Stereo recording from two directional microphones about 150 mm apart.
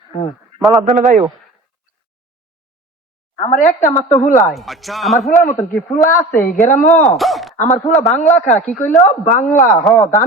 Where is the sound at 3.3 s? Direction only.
50° left (ahead or behind).